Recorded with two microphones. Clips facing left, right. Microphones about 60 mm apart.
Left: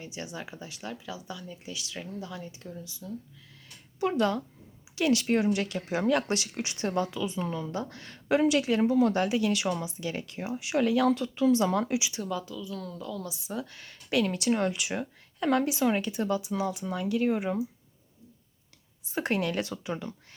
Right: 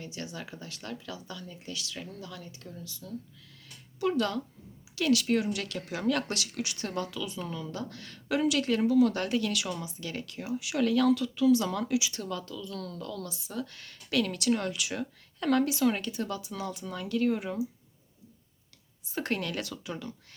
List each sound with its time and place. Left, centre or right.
0.0 s speech: centre
4.0 s speech: left
9.1 s speech: centre
10.8 s speech: centre
11.1 s speech: left
12.1 s speech: centre
19.1 s speech: centre